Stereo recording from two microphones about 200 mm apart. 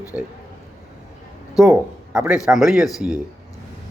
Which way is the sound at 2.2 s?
5° right (ahead or behind).